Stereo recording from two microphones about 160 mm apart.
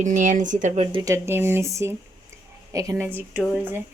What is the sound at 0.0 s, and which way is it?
Speech, 50° right (ahead or behind).